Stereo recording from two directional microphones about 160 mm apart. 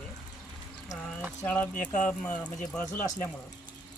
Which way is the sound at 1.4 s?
10° left (ahead or behind).